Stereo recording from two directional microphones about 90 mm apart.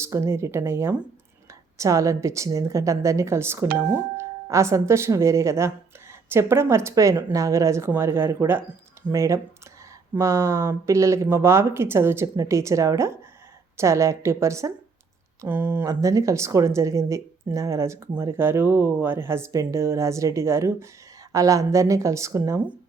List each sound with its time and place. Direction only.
0.0 s a woman's voice: 30° right (ahead or behind)
15.9 s a woman's voice: 40° right (ahead or behind)